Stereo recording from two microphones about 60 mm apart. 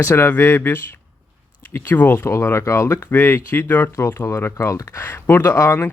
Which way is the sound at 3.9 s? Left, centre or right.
Left.